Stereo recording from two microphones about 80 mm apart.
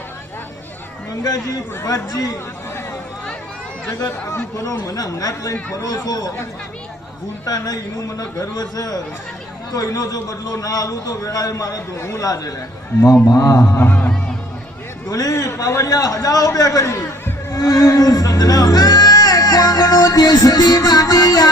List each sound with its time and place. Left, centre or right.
1.5 s a man's voice: left
3.9 s a man's voice: left
7.4 s a man's voice: left
11.9 s speech: left
12.2 s a man's voice: left
15.1 s a man's voice: left